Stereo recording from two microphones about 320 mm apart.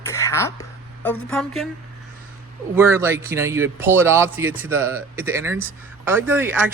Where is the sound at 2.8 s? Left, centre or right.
Centre.